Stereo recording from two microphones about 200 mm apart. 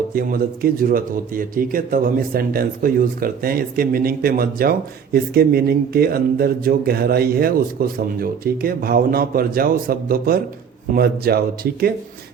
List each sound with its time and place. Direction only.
0.1 s speech: 45° right (ahead or behind)